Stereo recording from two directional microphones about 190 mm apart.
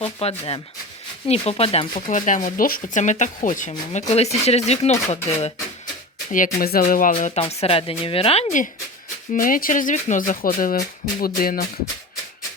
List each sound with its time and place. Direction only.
0.0 s speech: 30° left (ahead or behind)
2.0 s speech: 40° left (ahead or behind)
6.3 s speech: 45° left (ahead or behind)
7.1 s speech: 35° left (ahead or behind)
9.3 s speech: 45° left (ahead or behind)